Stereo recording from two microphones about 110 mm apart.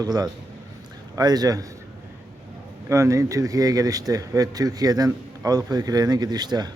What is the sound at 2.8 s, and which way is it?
Speech, 25° right (ahead or behind).